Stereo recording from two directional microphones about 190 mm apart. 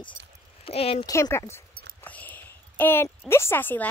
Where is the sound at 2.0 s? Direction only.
10° left (ahead or behind).